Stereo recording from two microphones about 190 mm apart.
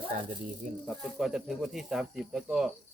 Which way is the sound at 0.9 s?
Centre (ahead or behind).